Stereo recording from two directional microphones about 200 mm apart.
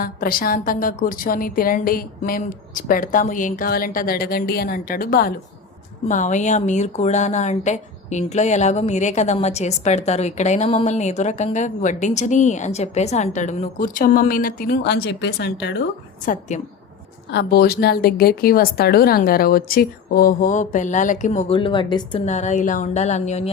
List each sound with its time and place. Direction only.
0.0 s a woman's voice: 45° left (ahead or behind)
16.2 s a woman's voice: 40° left (ahead or behind)
21.5 s speech: 25° left (ahead or behind)
22.3 s speech: 35° left (ahead or behind)